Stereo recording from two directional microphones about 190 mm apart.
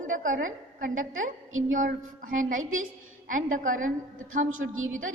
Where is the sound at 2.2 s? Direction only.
45° right (ahead or behind).